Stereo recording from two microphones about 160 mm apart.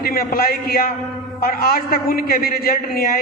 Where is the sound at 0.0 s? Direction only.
65° left (ahead or behind).